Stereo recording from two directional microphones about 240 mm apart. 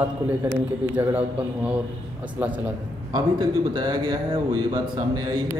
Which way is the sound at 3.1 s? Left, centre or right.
Centre.